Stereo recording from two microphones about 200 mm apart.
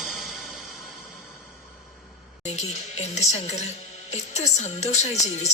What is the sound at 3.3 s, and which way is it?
A woman's voice, 35° left (ahead or behind).